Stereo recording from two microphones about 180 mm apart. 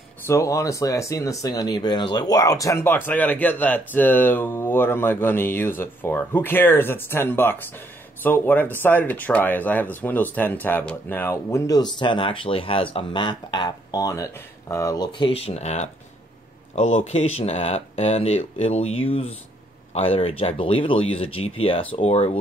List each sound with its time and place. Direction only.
0.3 s speech: 15° left (ahead or behind); by 22.4 s 35° left (ahead or behind)